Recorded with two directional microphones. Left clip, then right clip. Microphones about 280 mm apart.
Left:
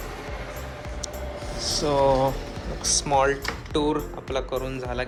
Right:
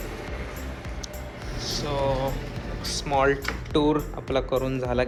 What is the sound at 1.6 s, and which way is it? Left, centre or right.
Speech, left.